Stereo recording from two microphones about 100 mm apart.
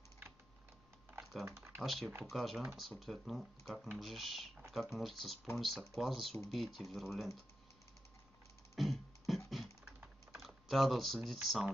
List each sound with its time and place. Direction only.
1.4 s speech: 25° right (ahead or behind)
1.8 s speech: centre (ahead or behind)
8.7 s music: centre (ahead or behind)
9.5 s computer keyboard: centre (ahead or behind)
10.3 s speech: centre (ahead or behind)